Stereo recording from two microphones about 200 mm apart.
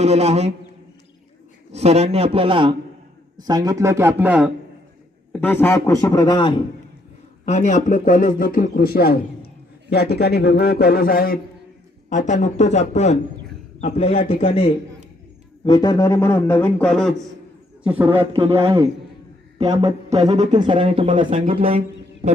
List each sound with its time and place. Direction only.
0.0 s a man's voice: 30° right (ahead or behind)
1.7 s a man's voice: 30° right (ahead or behind); by 4.5 s 5° right (ahead or behind)
5.3 s a man's voice: 10° left (ahead or behind)
7.4 s a man's voice: 35° left (ahead or behind); by 17.2 s centre (ahead or behind)
17.8 s speech: 10° right (ahead or behind)
18.3 s a man's voice: 30° right (ahead or behind)
21.2 s a man's voice: 40° right (ahead or behind)
21.4 s speech: 25° right (ahead or behind)